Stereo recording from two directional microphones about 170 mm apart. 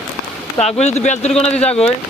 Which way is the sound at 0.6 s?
40° left (ahead or behind).